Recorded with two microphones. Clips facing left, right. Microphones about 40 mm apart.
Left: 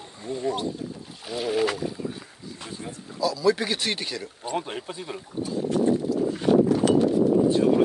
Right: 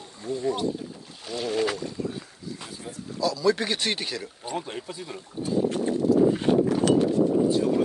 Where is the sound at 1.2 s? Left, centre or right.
Centre.